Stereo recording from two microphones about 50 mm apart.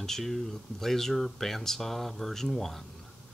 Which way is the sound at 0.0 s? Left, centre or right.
Centre.